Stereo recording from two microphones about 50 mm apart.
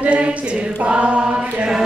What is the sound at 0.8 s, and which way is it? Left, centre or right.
Chant, right.